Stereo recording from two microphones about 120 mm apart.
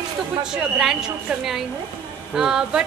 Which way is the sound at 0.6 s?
5° right (ahead or behind).